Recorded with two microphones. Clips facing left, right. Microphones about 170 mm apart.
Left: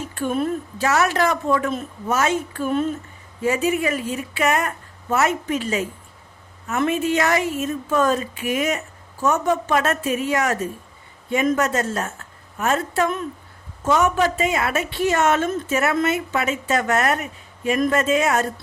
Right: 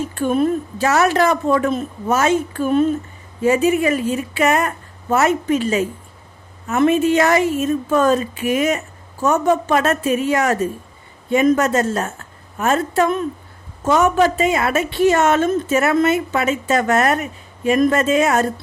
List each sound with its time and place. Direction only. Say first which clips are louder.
0.1 s a woman's voice: right 4 dB; 25° right (ahead or behind)